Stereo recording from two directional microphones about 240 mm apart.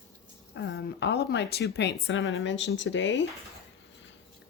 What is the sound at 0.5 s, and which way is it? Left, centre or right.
Speech, left.